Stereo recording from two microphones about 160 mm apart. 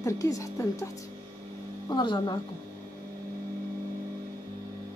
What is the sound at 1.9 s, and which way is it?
Speech, 30° left (ahead or behind).